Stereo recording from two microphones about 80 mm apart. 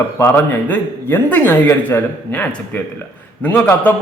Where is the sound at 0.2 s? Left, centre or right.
Left.